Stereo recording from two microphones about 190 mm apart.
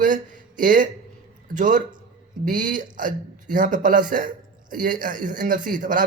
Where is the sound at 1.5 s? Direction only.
45° right (ahead or behind).